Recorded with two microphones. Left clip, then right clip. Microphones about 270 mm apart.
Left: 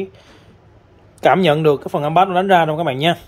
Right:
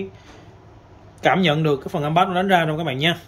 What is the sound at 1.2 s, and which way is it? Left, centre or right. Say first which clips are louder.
Speech: left 5 dB; left.